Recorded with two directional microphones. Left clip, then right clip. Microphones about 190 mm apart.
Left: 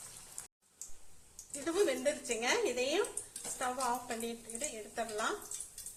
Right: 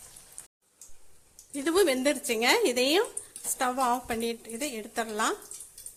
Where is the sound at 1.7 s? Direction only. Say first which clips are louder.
Right 8 dB; 55° right (ahead or behind).